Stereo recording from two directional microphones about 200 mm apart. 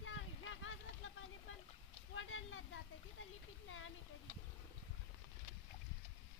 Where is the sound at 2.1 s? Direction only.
80° left.